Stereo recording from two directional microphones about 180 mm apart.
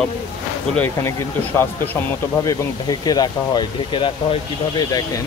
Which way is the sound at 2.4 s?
20° left (ahead or behind).